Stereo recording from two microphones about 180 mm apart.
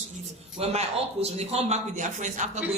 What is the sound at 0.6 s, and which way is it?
A man's voice, 35° right (ahead or behind).